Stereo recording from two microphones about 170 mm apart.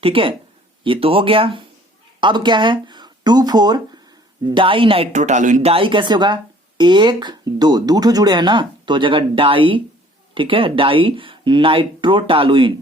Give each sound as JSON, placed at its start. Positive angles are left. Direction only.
{"t": 0.0, "sound": "speech", "side_deg": -30}